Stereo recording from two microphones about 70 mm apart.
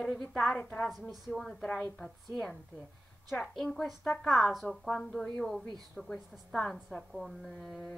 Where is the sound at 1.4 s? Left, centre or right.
Centre.